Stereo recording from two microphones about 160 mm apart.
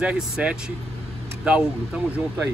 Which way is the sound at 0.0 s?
10° right (ahead or behind).